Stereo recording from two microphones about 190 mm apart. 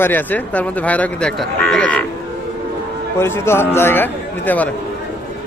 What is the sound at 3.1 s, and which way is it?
Speech, 10° left (ahead or behind).